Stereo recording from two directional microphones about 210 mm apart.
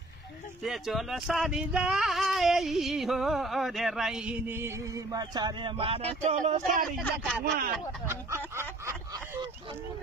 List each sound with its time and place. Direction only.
0.6 s speech: centre (ahead or behind); by 6.9 s 35° right (ahead or behind)
7.4 s speech: 45° right (ahead or behind)
8.5 s snicker: 10° right (ahead or behind)